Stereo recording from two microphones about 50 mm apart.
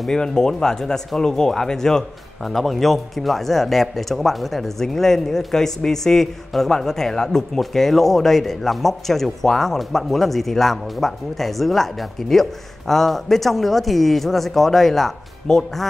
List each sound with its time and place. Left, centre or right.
0.0 s speech: centre